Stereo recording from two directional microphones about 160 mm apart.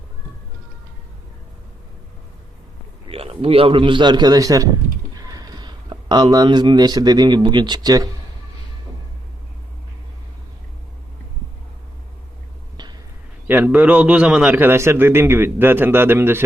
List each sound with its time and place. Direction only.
3.1 s a man's voice: 35° right (ahead or behind)
13.5 s a man's voice: 10° right (ahead or behind)